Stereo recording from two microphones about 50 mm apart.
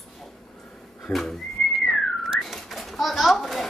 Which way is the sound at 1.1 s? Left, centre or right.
Left.